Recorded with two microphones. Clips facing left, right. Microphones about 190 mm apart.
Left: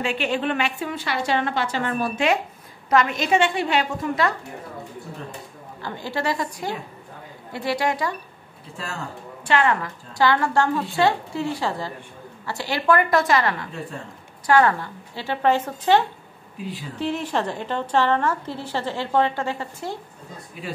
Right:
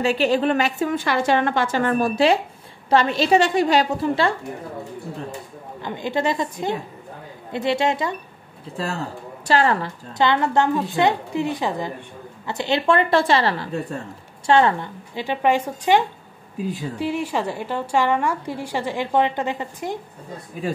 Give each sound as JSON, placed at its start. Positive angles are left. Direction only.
{"t": 0.0, "sound": "a woman's voice", "side_deg": -35}
{"t": 5.8, "sound": "a woman's voice", "side_deg": -20}
{"t": 8.7, "sound": "a woman's voice", "side_deg": -35}
{"t": 17.0, "sound": "a woman's voice", "side_deg": -10}
{"t": 20.6, "sound": "a woman's voice", "side_deg": -45}